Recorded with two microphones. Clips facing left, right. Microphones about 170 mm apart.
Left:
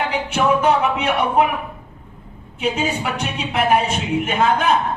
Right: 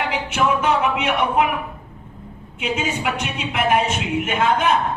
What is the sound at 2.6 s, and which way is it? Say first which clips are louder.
A woman's voice: left 3 dB; 35° left (ahead or behind).